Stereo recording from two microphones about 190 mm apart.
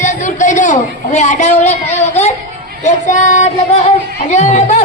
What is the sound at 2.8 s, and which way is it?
Speech, 40° left (ahead or behind).